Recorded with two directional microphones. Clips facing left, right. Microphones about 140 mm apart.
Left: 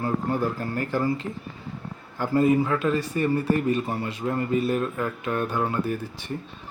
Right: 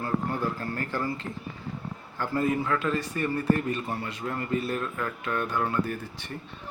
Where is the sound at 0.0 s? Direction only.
20° left (ahead or behind).